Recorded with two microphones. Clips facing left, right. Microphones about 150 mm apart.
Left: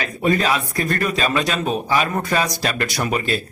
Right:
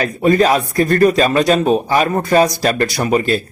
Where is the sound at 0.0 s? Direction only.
40° right (ahead or behind).